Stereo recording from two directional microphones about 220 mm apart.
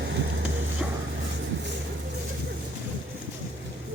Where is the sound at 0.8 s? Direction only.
5° right (ahead or behind).